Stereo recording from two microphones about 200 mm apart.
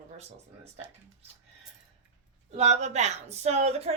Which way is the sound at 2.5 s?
35° right (ahead or behind).